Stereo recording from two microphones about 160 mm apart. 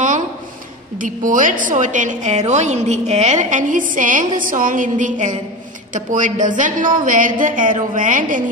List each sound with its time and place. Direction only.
0.9 s a woman's voice: 55° right (ahead or behind)